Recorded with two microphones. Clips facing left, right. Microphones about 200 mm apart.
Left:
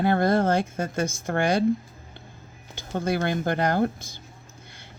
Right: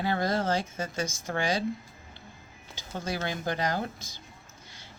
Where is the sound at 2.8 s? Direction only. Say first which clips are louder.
Left 8 dB; 55° left (ahead or behind).